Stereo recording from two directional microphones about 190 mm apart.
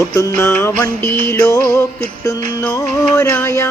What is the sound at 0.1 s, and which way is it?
Music, 15° left (ahead or behind).